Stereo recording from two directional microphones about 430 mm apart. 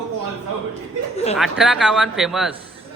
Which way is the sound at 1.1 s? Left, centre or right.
Centre.